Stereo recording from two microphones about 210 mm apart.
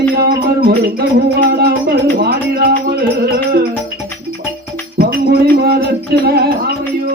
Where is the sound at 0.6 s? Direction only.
50° right (ahead or behind).